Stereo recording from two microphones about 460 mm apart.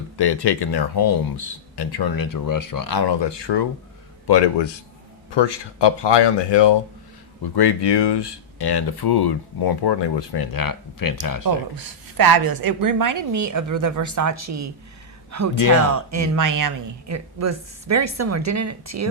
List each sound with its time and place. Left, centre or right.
0.2 s speech: left
7.4 s speech: left
11.4 s a woman's voice: right